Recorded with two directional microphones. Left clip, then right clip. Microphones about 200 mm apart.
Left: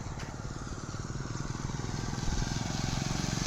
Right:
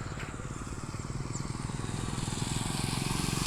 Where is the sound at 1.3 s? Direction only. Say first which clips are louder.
Even; 35° right (ahead or behind); by 2.5 s 15° right (ahead or behind).